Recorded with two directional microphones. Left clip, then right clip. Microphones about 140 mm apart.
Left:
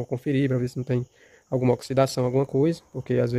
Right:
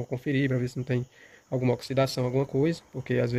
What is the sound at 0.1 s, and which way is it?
Speech, 45° left (ahead or behind).